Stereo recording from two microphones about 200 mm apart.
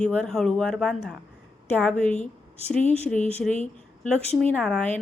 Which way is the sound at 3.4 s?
Centre (ahead or behind).